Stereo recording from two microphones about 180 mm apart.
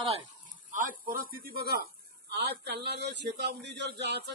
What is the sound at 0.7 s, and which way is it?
A man's voice, 50° right (ahead or behind).